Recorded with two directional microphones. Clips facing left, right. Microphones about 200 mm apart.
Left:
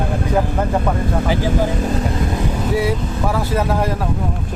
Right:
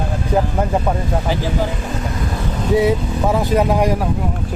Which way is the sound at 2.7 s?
20° right (ahead or behind).